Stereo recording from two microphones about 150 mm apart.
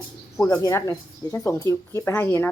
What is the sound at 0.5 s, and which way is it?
Speech, 20° left (ahead or behind).